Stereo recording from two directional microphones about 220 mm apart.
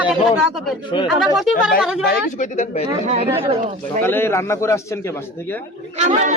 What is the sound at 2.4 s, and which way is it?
Speech, 35° left (ahead or behind).